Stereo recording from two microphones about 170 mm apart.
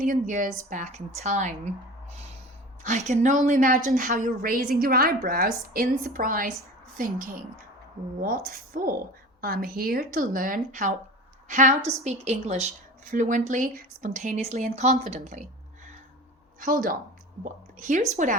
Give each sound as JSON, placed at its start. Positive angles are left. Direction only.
{"t": 0.0, "sound": "speech", "side_deg": -50}
{"t": 2.8, "sound": "a woman's voice", "side_deg": -45}
{"t": 16.6, "sound": "speech", "side_deg": -55}